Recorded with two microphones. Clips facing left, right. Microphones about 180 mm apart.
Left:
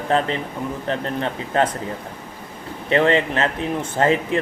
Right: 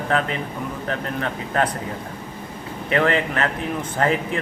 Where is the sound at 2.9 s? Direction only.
30° left (ahead or behind).